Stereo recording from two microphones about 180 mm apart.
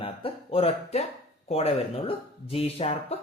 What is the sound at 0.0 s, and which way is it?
Speech, 30° left (ahead or behind).